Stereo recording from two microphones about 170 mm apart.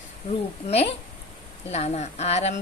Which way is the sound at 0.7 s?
35° left (ahead or behind).